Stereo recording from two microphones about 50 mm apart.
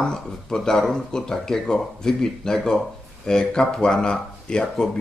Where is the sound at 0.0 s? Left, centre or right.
Centre.